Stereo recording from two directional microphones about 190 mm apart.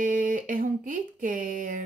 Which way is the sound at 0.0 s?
45° right (ahead or behind).